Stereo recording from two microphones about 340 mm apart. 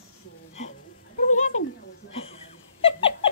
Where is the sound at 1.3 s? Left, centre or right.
Left.